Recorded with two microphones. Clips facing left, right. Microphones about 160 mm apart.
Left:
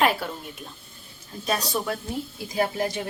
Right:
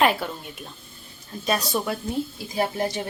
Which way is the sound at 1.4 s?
Centre (ahead or behind).